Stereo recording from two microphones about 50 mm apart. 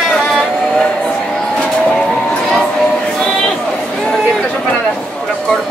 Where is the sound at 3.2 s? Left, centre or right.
Centre.